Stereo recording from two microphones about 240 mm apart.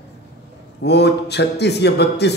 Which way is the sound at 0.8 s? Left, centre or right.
Left.